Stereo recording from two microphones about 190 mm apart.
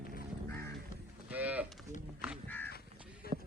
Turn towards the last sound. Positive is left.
turn(degrees=50)  # may be behind; listen again after turning